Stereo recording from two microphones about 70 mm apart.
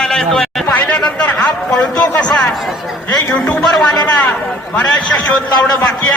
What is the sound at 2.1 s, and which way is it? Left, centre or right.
Chatter, centre.